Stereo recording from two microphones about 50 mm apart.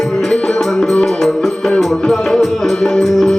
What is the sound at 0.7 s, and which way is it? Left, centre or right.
Music, centre.